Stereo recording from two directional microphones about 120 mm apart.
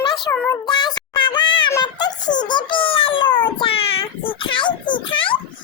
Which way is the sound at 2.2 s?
90° left.